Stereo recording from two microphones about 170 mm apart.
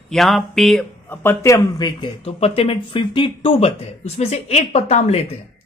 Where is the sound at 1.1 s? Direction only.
15° left (ahead or behind).